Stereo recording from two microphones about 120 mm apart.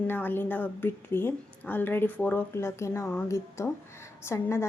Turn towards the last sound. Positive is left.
turn(degrees=20)  # may be behind; listen again after turning